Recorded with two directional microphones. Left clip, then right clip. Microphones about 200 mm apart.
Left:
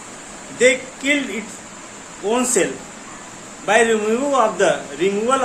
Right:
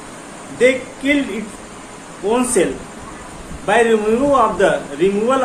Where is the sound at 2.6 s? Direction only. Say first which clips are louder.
Right 3 dB; 15° left (ahead or behind).